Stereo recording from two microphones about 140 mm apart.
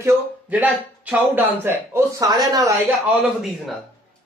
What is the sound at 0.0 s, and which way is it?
Speech, 15° right (ahead or behind).